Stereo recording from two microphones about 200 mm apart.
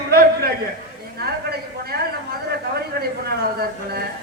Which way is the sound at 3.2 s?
50° right (ahead or behind).